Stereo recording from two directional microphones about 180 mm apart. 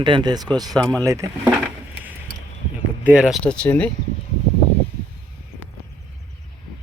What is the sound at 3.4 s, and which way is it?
Speech, 5° left (ahead or behind).